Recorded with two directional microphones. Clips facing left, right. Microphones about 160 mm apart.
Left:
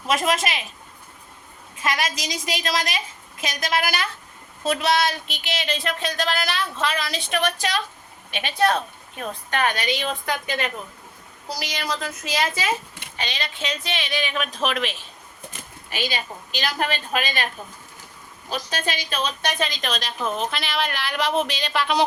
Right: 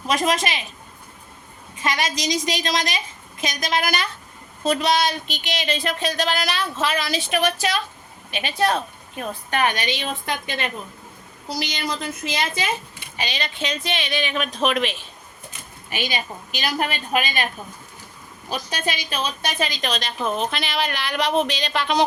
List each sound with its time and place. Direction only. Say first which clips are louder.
0.1 s speech: right 1 dB; 5° left (ahead or behind)
1.8 s a woman's voice: right 2 dB; 5° left (ahead or behind); by 10.7 s 25° right (ahead or behind)
12.9 s a sound: even; 70° left (ahead or behind)
13.1 s speech: right 2 dB; 5° right (ahead or behind)
15.9 s a woman's voice: right 1 dB; 15° right (ahead or behind); by 22.0 s 5° left (ahead or behind)